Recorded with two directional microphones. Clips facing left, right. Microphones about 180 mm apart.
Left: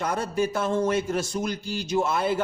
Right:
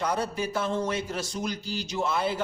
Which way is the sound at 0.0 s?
50° left (ahead or behind).